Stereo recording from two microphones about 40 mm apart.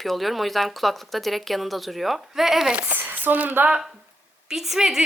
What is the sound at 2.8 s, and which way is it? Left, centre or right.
Speech, right.